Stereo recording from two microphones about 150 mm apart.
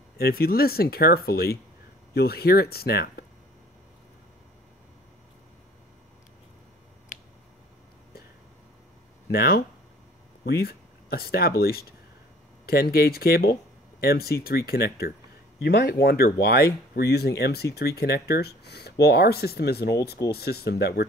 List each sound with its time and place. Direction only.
0.2 s speech: 85° left
9.3 s speech: 90° left